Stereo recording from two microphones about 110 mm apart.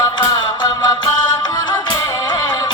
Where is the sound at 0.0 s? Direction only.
40° left (ahead or behind).